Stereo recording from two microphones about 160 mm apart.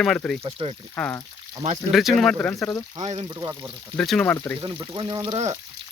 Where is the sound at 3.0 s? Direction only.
40° right (ahead or behind).